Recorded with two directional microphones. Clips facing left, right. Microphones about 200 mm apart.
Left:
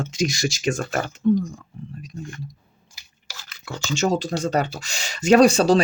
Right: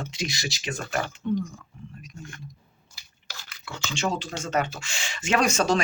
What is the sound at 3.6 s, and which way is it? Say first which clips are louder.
Speech: left 6 dB; 40° left (ahead or behind).